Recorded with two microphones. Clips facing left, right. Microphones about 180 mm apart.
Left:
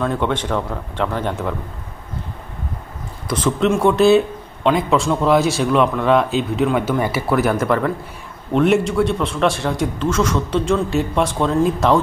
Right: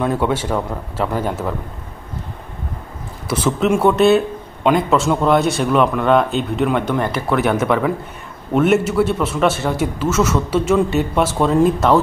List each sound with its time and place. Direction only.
0.0 s speech: 5° right (ahead or behind)
3.3 s a man's voice: 5° right (ahead or behind)